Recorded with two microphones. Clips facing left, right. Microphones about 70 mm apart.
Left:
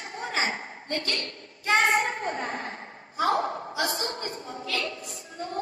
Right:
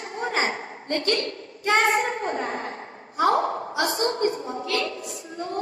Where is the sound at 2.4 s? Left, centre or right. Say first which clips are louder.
Right 3 dB; right.